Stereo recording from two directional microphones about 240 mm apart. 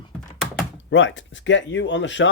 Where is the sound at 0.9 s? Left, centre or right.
Left.